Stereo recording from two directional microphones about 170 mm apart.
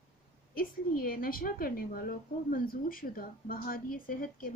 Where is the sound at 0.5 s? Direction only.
60° left (ahead or behind).